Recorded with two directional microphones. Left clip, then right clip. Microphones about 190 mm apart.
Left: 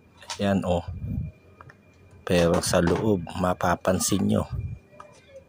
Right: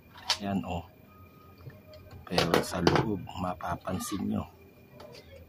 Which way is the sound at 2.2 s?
30° left (ahead or behind).